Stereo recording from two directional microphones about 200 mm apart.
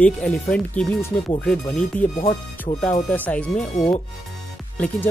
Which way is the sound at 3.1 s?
10° left (ahead or behind).